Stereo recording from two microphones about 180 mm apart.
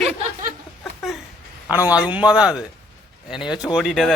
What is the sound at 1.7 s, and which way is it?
Speech, 10° right (ahead or behind).